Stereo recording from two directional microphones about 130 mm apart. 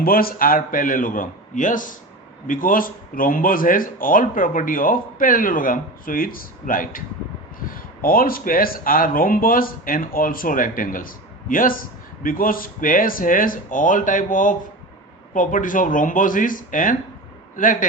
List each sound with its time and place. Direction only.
0.1 s speech: 90° left